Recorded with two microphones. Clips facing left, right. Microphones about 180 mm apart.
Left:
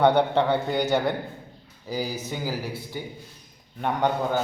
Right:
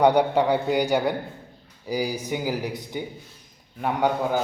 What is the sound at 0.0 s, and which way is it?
A man's voice, 10° right (ahead or behind).